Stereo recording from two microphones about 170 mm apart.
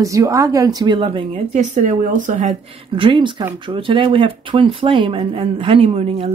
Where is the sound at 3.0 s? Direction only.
30° right (ahead or behind).